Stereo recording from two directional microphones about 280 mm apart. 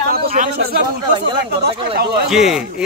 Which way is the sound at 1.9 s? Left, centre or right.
Right.